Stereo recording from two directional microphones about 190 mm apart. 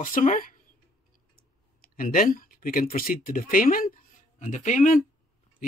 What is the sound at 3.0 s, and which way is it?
Speech, 45° left (ahead or behind).